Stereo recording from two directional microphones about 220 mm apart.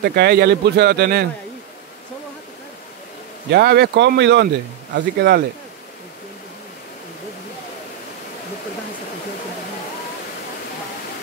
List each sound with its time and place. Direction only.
0.0 s speech: 45° right (ahead or behind)
3.5 s speech: 45° right (ahead or behind)